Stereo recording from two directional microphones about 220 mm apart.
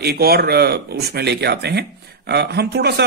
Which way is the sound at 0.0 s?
45° right (ahead or behind).